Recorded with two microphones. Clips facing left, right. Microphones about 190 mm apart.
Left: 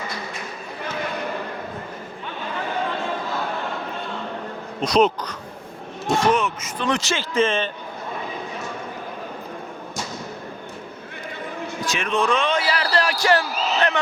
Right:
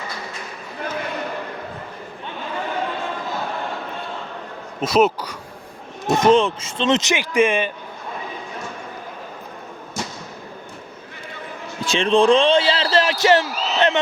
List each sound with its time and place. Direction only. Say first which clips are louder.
4.8 s speech: right 1 dB; 5° right (ahead or behind)
6.1 s a man's voice: right 6 dB; 25° right (ahead or behind)
11.9 s a man's voice: right 8 dB; 30° right (ahead or behind)